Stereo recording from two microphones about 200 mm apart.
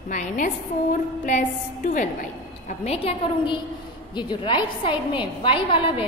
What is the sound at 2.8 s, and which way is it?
A woman's voice, 30° left (ahead or behind).